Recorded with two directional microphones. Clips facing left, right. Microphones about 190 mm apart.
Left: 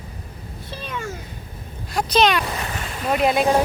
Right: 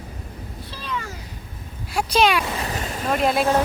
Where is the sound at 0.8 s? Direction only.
55° left (ahead or behind).